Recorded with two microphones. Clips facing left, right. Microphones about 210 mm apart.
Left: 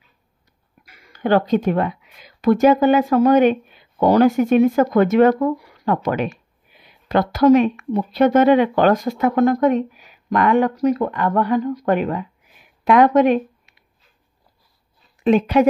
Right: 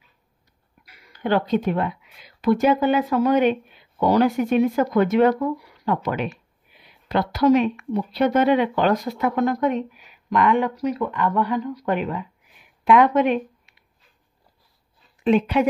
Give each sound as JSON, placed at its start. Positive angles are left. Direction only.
{"t": 0.8, "sound": "speech", "side_deg": 45}
{"t": 15.2, "sound": "speech", "side_deg": 40}